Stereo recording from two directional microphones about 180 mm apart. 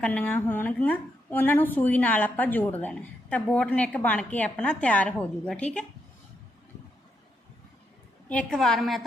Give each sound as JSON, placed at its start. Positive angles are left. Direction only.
{"t": 0.0, "sound": "a woman's voice", "side_deg": 10}
{"t": 8.3, "sound": "a woman's voice", "side_deg": 5}